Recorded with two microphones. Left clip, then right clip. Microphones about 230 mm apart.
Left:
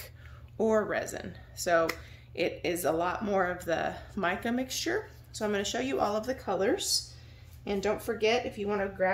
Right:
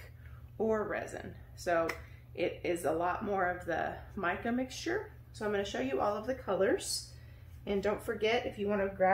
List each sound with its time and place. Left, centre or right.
0.6 s speech: left